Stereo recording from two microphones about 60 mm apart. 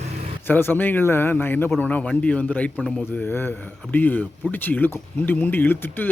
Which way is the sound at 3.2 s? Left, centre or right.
Left.